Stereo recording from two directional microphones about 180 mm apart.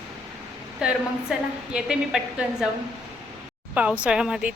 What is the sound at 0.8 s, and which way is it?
Speech, 5° right (ahead or behind).